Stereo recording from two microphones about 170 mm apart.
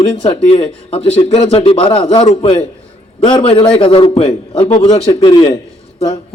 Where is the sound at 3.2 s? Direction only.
30° left (ahead or behind).